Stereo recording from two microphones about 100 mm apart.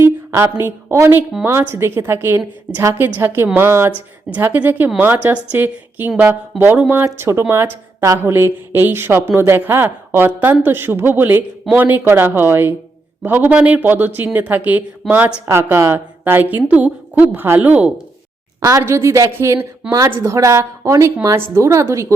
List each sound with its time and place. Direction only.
0.0 s a woman's voice: 25° right (ahead or behind)
6.8 s a woman's voice: 15° right (ahead or behind)
7.2 s a woman's voice: 25° right (ahead or behind)
18.8 s a woman's voice: 25° right (ahead or behind)